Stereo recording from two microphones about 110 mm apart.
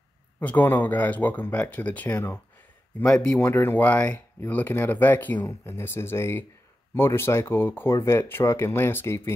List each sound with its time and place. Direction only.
0.4 s speech: 15° left (ahead or behind)
3.0 s speech: 5° left (ahead or behind)
3.3 s speech: 20° left (ahead or behind)